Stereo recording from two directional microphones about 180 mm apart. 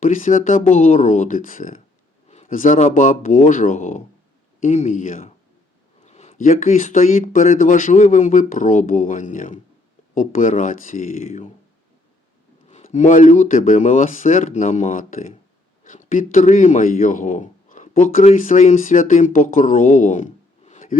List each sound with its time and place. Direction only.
0.0 s speech: 45° left (ahead or behind)
12.6 s a man's voice: 40° left (ahead or behind)